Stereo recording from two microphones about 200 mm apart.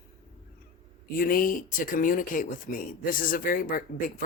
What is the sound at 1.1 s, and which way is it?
Speech, 45° left (ahead or behind).